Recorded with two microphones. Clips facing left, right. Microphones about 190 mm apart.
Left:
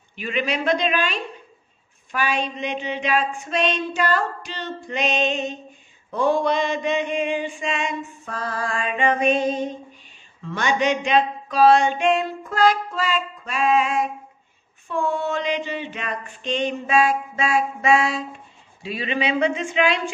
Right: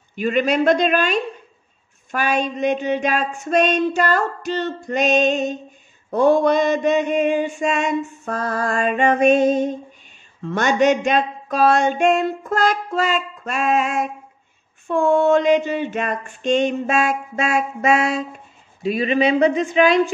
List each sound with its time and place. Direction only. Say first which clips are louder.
0.1 s mantra: right 7 dB; 45° right (ahead or behind)
18.8 s speech: right 7 dB; 45° right (ahead or behind)